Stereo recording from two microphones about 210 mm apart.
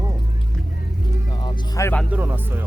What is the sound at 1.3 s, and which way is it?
Speech, 20° left (ahead or behind).